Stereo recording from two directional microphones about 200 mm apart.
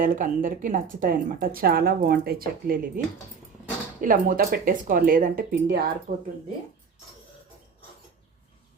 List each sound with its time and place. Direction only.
0.0 s speech: 45° right (ahead or behind)
4.0 s speech: 45° right (ahead or behind)